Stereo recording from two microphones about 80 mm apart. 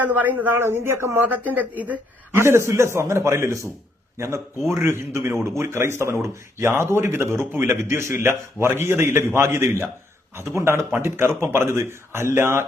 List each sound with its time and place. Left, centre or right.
0.0 s speech: right
1.3 s speech: centre
2.3 s speech: right
4.7 s speech: right